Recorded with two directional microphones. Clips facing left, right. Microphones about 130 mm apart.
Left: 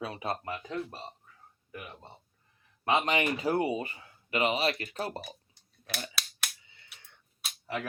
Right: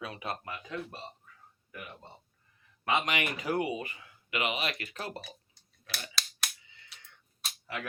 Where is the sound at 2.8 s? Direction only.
30° left (ahead or behind).